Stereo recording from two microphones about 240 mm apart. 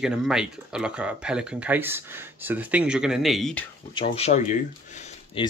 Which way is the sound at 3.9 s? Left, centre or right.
Left.